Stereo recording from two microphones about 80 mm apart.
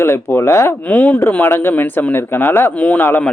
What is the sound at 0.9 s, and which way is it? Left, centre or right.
Speech, centre.